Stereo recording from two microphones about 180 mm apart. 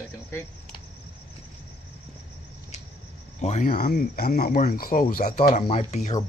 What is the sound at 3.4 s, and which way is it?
Speech, 45° left (ahead or behind).